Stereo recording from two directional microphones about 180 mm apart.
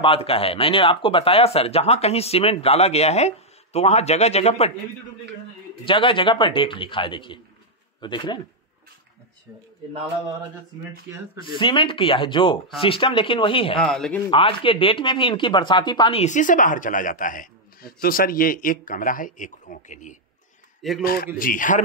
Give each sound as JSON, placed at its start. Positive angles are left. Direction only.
{"t": 0.0, "sound": "speech", "side_deg": 30}
{"t": 5.9, "sound": "speech", "side_deg": 30}
{"t": 11.4, "sound": "speech", "side_deg": 25}
{"t": 13.7, "sound": "speech", "side_deg": 5}
{"t": 14.3, "sound": "a man's voice", "side_deg": 30}
{"t": 21.0, "sound": "a man's voice", "side_deg": 55}